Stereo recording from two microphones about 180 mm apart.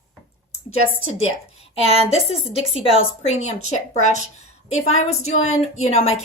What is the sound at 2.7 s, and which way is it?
A woman's voice, 35° left (ahead or behind).